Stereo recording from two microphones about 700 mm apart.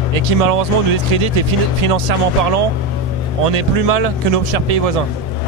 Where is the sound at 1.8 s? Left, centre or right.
Right.